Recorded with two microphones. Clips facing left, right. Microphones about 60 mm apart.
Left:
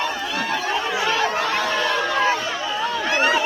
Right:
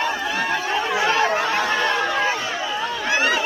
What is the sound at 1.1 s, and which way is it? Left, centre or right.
Chatter, right.